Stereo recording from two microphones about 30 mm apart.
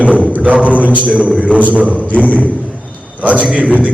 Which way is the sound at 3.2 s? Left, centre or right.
Right.